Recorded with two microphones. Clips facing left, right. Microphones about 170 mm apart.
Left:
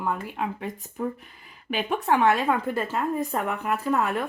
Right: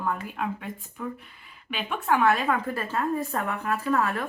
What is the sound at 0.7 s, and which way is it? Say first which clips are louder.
Speech: left 5 dB; 40° left (ahead or behind).